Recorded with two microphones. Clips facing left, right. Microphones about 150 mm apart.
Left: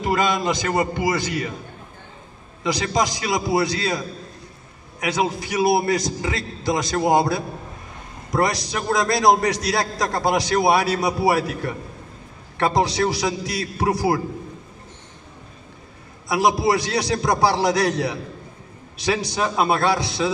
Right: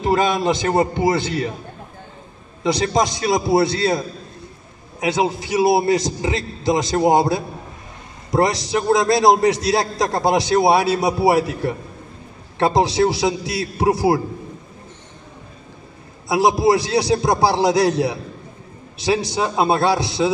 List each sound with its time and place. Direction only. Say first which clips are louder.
0.0 s a man's voice: right 3 dB; 25° right (ahead or behind)
2.6 s a man's voice: right 3 dB; 25° right (ahead or behind)
5.0 s a man's voice: right 3 dB; 25° right (ahead or behind)
16.3 s a man's voice: right 3 dB; 25° right (ahead or behind)